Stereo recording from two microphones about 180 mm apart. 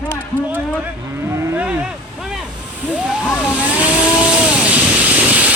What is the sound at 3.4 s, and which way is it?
Vehicle, 5° right (ahead or behind).